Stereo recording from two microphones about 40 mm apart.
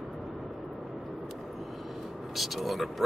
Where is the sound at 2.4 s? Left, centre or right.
Centre.